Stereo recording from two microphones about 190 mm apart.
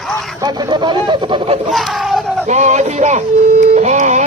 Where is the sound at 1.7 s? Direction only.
Centre (ahead or behind).